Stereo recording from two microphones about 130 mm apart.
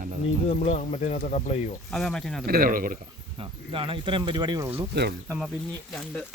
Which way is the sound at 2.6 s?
90° right.